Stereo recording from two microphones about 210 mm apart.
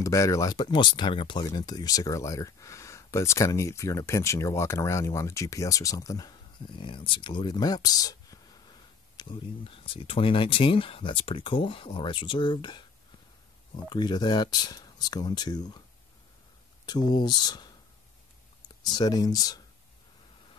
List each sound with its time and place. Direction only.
0.0 s speech: 15° left (ahead or behind)
13.8 s speech: 20° left (ahead or behind)
16.8 s speech: 20° left (ahead or behind)
18.9 s speech: 20° left (ahead or behind)